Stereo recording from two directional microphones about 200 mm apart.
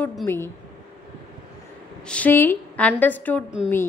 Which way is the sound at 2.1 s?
10° left (ahead or behind).